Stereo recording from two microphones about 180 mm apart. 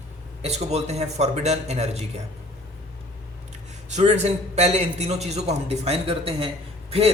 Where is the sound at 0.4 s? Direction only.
35° right (ahead or behind).